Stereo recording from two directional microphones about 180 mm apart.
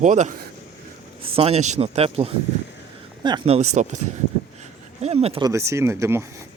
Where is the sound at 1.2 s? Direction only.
30° right (ahead or behind).